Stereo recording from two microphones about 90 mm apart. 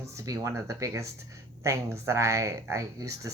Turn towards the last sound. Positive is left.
turn(degrees=-35)  # may be behind; listen again after turning